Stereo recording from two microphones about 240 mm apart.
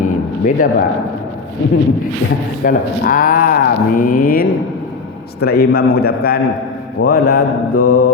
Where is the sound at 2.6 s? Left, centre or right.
Left.